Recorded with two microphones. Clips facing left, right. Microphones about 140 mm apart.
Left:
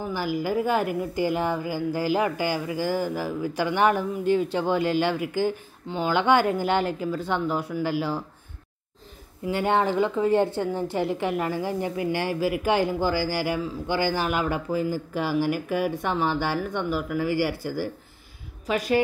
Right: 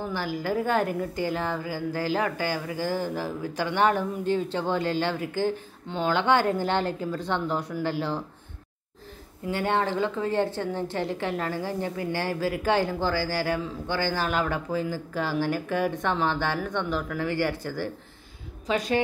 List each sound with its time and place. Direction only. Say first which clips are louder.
0.0 s a woman's voice: left 3 dB; 10° left (ahead or behind)
9.5 s a woman's voice: left 3 dB; 15° left (ahead or behind)